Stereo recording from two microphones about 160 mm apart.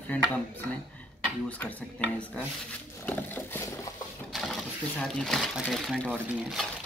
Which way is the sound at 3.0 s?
10° left (ahead or behind).